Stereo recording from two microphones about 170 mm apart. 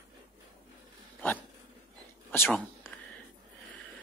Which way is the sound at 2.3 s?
10° left (ahead or behind).